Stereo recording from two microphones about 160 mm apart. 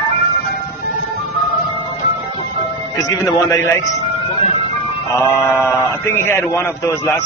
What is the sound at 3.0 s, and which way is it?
Speech, 20° left (ahead or behind).